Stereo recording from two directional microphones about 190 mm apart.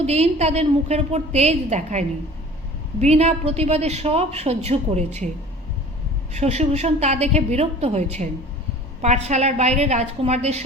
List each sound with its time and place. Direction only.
0.0 s a woman's voice: 35° right (ahead or behind)
6.3 s a woman's voice: 35° right (ahead or behind)